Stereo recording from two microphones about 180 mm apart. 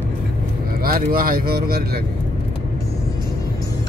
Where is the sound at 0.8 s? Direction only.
55° right (ahead or behind).